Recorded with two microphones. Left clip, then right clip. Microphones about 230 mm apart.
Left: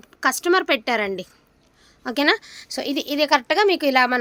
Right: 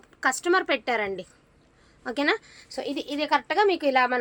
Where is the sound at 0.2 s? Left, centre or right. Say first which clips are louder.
Left 4 dB; left.